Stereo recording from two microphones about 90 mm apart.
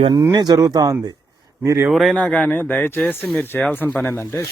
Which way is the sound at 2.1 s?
10° left (ahead or behind).